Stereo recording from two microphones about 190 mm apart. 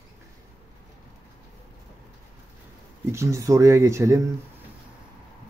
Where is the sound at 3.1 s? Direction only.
15° right (ahead or behind).